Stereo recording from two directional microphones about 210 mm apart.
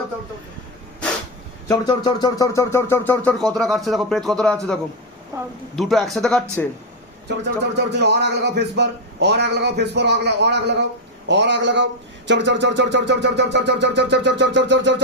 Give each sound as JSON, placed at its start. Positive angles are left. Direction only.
{"t": 1.6, "sound": "speech", "side_deg": 20}
{"t": 5.7, "sound": "speech", "side_deg": 0}
{"t": 7.3, "sound": "a man's voice", "side_deg": -55}
{"t": 11.3, "sound": "a sound", "side_deg": -55}